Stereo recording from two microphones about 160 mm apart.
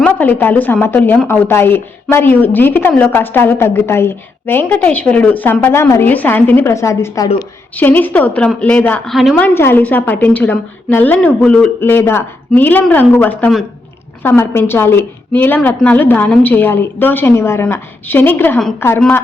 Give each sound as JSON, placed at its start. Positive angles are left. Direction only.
{"t": 0.0, "sound": "a woman's voice", "side_deg": 10}
{"t": 9.6, "sound": "a woman's voice", "side_deg": 15}